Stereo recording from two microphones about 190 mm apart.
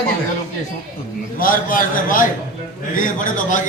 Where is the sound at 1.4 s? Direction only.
45° left (ahead or behind).